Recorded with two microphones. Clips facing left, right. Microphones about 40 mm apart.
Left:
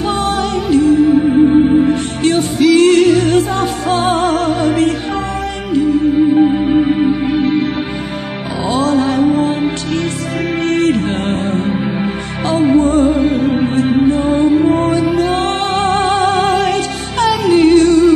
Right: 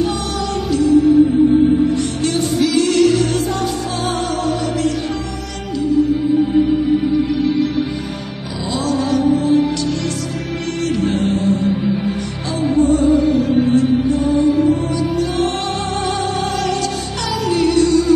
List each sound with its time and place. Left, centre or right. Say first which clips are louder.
0.2 s music: left 5 dB; left
8.6 s music: left 5 dB; left